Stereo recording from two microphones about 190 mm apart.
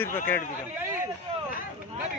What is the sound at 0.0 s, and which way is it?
Speech, 10° left (ahead or behind).